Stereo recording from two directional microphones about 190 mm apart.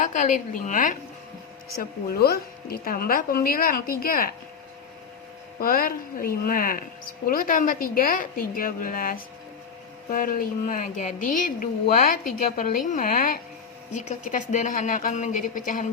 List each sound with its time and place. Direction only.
0.0 s a woman's voice: 40° left (ahead or behind)
5.5 s a woman's voice: 50° left (ahead or behind)